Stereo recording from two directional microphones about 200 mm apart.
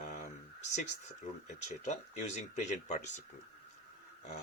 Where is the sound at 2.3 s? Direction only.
35° left (ahead or behind).